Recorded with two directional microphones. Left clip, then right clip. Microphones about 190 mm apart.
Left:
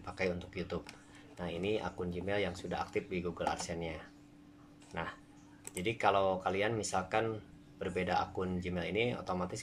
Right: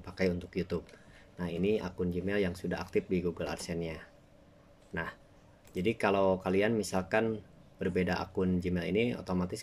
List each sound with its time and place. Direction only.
0.0 s speech: 45° right (ahead or behind)